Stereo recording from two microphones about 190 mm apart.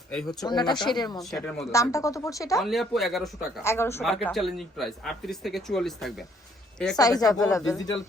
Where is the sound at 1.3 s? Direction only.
Centre (ahead or behind).